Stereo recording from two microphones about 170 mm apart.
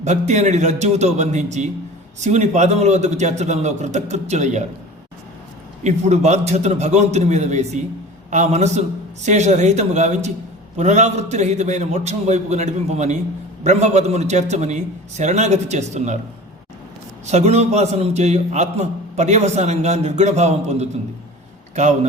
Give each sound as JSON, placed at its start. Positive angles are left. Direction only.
{"t": 0.0, "sound": "a man's voice", "side_deg": -45}
{"t": 5.8, "sound": "a man's voice", "side_deg": -40}
{"t": 17.2, "sound": "a man's voice", "side_deg": -40}